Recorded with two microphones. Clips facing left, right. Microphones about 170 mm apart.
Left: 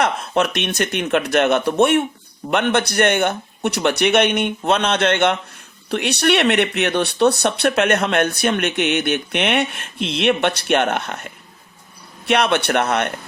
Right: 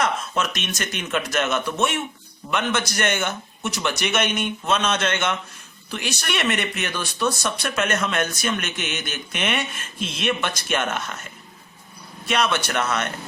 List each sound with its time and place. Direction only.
0.0 s speech: 60° left (ahead or behind)